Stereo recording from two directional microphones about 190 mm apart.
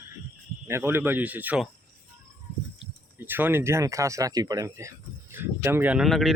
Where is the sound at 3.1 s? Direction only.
10° right (ahead or behind).